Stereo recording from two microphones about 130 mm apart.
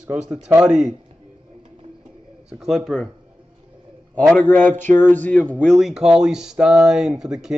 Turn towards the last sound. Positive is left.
turn(degrees=-5)  # may be behind; listen again after turning